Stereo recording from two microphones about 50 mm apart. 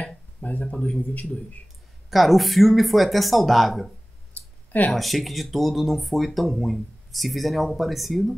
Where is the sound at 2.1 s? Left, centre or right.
Centre.